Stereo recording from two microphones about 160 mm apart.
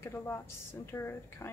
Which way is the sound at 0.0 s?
15° left (ahead or behind).